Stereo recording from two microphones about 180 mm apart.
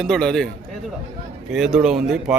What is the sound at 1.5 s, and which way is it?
Speech, 5° right (ahead or behind).